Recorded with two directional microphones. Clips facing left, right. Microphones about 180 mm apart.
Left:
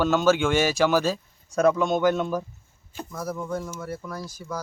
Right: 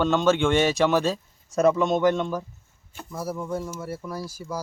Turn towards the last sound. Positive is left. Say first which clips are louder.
# right 2 dB
turn(degrees=-10)  # may be behind; listen again after turning